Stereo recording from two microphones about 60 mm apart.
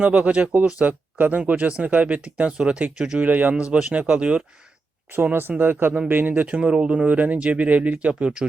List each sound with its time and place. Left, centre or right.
0.0 s speech: right
2.2 s speech: centre
3.2 s speech: right
5.1 s speech: right
6.5 s speech: centre